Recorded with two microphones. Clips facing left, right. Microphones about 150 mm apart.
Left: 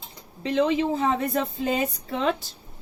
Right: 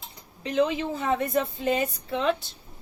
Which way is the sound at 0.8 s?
30° left (ahead or behind).